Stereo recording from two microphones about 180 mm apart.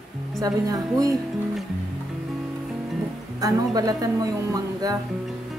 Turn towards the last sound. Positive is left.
turn(degrees=-20)  # may be behind; listen again after turning